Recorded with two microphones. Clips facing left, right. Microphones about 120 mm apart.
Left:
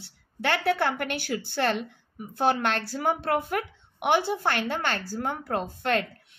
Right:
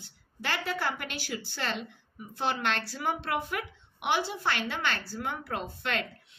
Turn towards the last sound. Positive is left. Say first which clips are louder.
# left 7 dB
turn(degrees=45)  # may be behind; listen again after turning